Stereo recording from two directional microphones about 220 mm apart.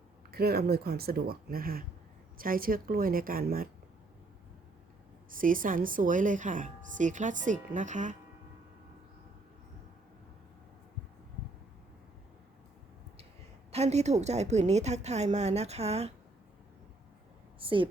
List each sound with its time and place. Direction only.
0.3 s speech: 45° right (ahead or behind)
5.3 s speech: 40° right (ahead or behind)
13.7 s a woman's voice: 30° right (ahead or behind)
17.6 s speech: 25° right (ahead or behind)